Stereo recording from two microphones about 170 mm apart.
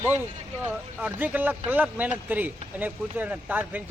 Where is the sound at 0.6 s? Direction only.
10° right (ahead or behind).